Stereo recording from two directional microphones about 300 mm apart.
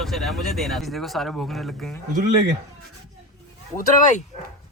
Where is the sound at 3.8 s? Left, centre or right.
Left.